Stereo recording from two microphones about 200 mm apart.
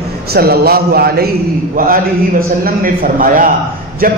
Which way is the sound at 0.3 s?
50° right (ahead or behind).